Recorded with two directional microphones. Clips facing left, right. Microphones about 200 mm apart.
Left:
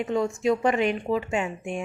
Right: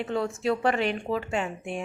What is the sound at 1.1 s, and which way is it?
Speech, 15° left (ahead or behind).